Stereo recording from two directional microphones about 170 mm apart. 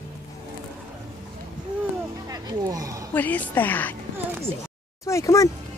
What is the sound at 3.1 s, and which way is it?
Speech, 10° left (ahead or behind).